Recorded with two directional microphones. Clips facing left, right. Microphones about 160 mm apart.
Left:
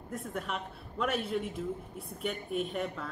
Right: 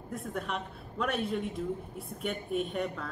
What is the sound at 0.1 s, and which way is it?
A woman's voice, centre (ahead or behind).